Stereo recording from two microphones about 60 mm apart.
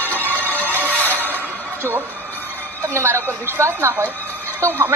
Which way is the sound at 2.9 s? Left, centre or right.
Right.